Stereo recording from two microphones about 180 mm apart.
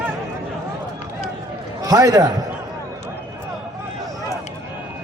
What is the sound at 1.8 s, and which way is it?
Speech, 20° right (ahead or behind).